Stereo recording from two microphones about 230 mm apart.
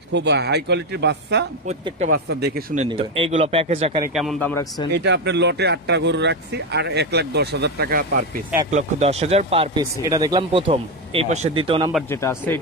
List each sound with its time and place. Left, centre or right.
0.1 s speech: right
1.7 s speech: right
2.7 s speech: right
4.1 s a man's voice: centre
4.9 s speech: right
8.6 s speech: right
12.1 s a man's voice: centre